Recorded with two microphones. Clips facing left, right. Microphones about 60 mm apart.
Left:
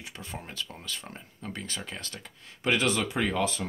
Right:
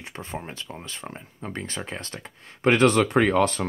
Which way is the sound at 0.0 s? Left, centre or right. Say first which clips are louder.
Right 6 dB; right.